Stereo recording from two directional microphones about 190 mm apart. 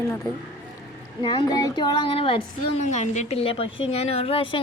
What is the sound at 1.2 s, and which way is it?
Speech, 25° left (ahead or behind).